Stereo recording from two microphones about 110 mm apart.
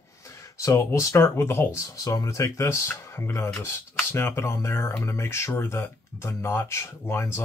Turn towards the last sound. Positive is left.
turn(degrees=20)  # may be behind; listen again after turning